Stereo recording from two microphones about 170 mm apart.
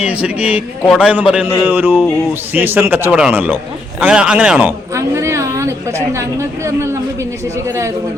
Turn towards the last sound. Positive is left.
turn(degrees=-15)  # may be behind; listen again after turning